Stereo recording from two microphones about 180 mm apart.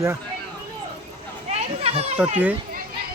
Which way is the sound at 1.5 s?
35° right (ahead or behind).